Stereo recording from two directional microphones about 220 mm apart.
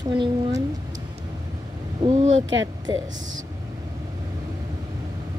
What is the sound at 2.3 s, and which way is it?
Speech, 60° right (ahead or behind).